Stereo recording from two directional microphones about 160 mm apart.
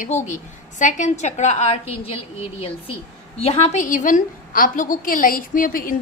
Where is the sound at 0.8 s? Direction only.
50° left (ahead or behind).